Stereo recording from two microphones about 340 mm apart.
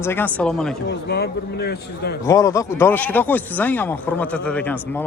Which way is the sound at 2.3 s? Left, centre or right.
Centre.